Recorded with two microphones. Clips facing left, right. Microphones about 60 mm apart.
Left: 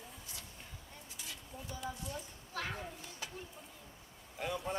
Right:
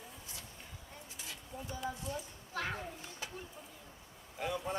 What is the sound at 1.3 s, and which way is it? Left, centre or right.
A child's voice, right.